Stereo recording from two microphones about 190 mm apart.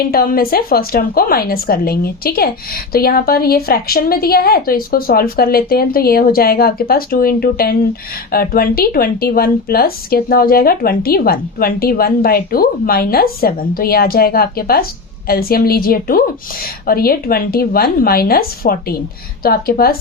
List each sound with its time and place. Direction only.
0.0 s speech: 50° left (ahead or behind)